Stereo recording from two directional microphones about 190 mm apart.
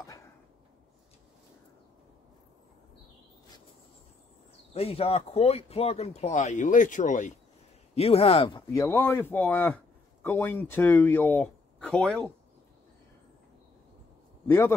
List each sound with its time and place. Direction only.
4.7 s speech: 30° left (ahead or behind)
8.6 s speech: 10° left (ahead or behind)
14.5 s speech: 15° left (ahead or behind)